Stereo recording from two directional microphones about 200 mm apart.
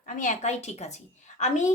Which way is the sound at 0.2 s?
35° left (ahead or behind).